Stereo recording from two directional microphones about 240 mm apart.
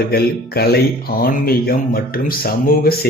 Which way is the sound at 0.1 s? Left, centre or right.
Left.